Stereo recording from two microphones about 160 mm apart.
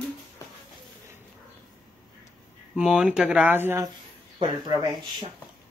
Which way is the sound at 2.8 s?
5° right (ahead or behind).